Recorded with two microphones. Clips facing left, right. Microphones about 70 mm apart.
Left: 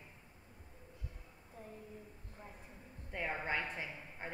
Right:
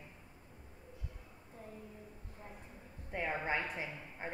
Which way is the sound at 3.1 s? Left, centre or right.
Centre.